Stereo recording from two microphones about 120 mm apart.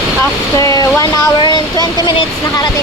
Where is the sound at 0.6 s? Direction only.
30° left (ahead or behind).